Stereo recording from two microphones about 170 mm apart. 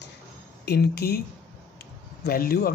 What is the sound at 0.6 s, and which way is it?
Speech, 70° left (ahead or behind).